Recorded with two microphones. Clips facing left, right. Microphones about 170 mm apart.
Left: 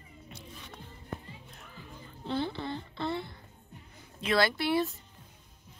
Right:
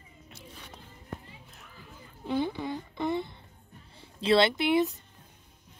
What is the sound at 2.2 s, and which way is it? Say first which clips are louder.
A woman's voice: right 3 dB; 15° right (ahead or behind).